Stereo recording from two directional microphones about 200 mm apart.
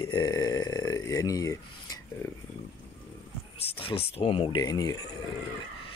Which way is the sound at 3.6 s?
25° left (ahead or behind).